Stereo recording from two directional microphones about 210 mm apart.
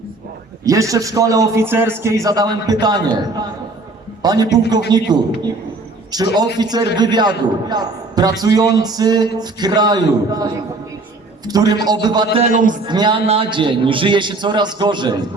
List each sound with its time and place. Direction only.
0.6 s a man's voice: 15° right (ahead or behind)
12.4 s a man's voice: 35° right (ahead or behind)
12.8 s a man's voice: 20° right (ahead or behind)